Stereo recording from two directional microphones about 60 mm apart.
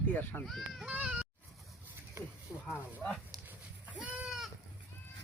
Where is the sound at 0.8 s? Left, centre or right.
Centre.